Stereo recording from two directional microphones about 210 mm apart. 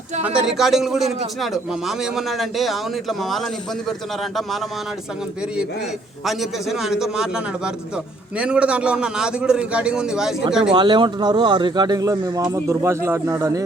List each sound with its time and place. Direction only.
0.2 s a man's voice: 5° right (ahead or behind)
6.2 s a man's voice: centre (ahead or behind)
10.8 s speech: 20° right (ahead or behind)